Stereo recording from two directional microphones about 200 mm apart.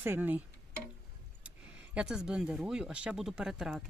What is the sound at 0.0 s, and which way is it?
Speech, 10° right (ahead or behind).